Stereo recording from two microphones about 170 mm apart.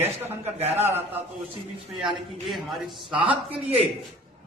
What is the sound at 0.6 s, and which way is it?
Speech, 40° right (ahead or behind).